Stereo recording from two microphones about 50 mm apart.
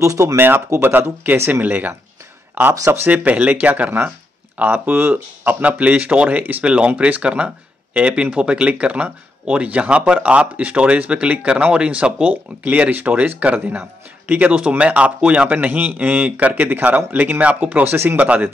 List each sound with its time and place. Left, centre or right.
0.0 s speech: right
0.7 s speech: right
3.1 s speech: right
16.6 s speech: right
17.8 s speech: right
18.1 s speech: right